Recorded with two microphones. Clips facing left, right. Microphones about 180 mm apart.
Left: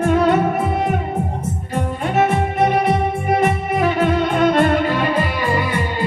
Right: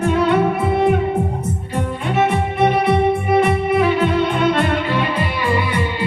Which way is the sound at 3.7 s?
45° left (ahead or behind).